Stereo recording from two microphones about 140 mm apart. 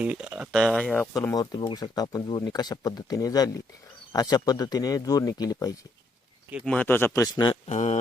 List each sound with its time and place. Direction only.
0.0 s speech: 5° right (ahead or behind)
1.1 s speech: 25° left (ahead or behind)
6.7 s speech: 10° left (ahead or behind); by 7.6 s 30° left (ahead or behind)
7.7 s speech: 55° left (ahead or behind)